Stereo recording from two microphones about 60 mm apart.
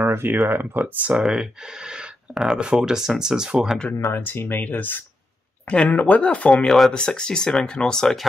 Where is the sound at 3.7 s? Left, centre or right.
Centre.